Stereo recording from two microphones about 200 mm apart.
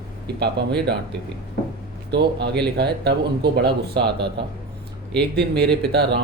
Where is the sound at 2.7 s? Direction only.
55° right (ahead or behind).